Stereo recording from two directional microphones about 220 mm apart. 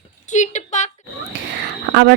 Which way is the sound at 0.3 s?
35° left (ahead or behind).